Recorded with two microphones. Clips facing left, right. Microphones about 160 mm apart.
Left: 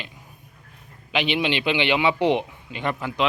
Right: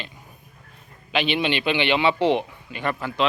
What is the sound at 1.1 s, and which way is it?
A man's voice, 15° left (ahead or behind).